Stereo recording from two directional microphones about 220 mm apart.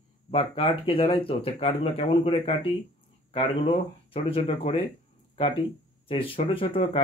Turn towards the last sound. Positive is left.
turn(degrees=25)  # may be behind; listen again after turning